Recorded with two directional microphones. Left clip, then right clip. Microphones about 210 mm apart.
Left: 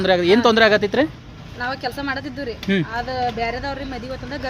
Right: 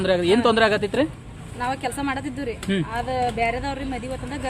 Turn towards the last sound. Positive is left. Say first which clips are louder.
# left 2 dB
turn(degrees=0)  # may be behind; listen again after turning